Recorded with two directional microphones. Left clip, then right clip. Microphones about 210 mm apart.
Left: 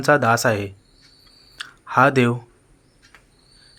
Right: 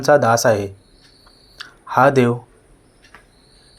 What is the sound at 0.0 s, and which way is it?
Speech, 20° left (ahead or behind).